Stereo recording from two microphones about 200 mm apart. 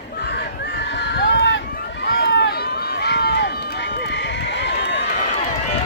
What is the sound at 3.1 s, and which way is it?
Run, 55° left (ahead or behind).